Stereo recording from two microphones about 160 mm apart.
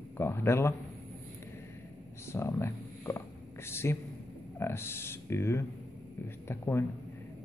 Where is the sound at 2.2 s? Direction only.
15° left (ahead or behind).